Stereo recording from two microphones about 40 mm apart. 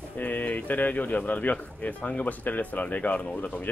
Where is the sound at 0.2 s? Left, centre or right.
Left.